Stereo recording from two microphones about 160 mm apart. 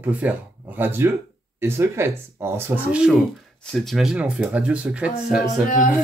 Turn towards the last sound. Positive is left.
turn(degrees=55)  # may be behind; listen again after turning